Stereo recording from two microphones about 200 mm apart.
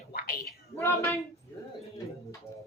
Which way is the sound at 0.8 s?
15° left (ahead or behind).